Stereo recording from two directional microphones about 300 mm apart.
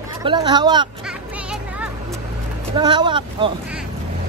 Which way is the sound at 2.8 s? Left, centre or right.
Centre.